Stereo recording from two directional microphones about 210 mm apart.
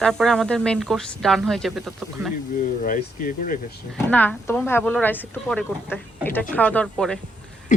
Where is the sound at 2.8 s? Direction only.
40° left (ahead or behind).